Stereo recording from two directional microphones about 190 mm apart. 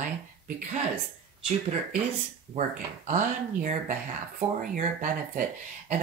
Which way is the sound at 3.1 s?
40° right (ahead or behind).